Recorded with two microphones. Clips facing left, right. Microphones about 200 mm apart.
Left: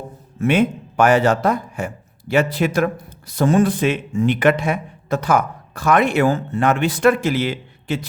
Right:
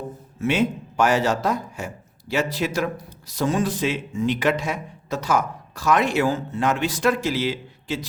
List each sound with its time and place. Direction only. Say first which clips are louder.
0.3 s a man's voice: left 5 dB; 55° left (ahead or behind)